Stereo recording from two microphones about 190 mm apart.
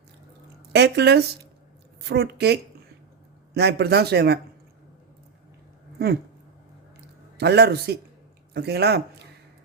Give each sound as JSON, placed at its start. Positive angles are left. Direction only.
{"t": 0.7, "sound": "speech", "side_deg": -60}
{"t": 7.3, "sound": "speech", "side_deg": -60}